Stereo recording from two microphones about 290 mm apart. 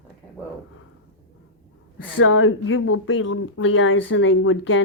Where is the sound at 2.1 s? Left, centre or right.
Left.